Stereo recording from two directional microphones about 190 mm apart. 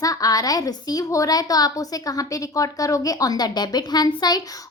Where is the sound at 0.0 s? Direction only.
20° left (ahead or behind).